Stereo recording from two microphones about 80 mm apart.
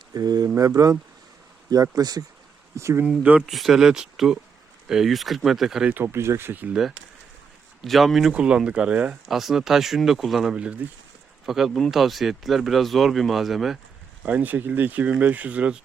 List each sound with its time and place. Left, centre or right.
0.1 s a sound: right
0.4 s speech: right
2.7 s speech: right
3.4 s speech: centre
5.9 s speech: right
7.8 s speech: centre
8.3 s speech: centre
9.3 s speech: centre
10.5 s speech: centre
11.4 s speech: centre
14.3 s speech: right